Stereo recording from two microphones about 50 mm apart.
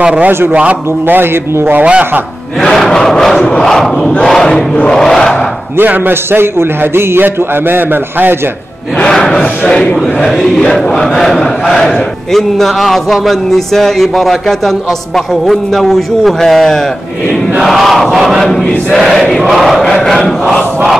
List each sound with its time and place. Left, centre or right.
0.0 s speech: right
1.0 s a man's voice: right
2.6 s crowd: centre
5.9 s a man's voice: right
9.1 s crowd: centre
11.7 s a man's voice: centre
19.8 s crowd: centre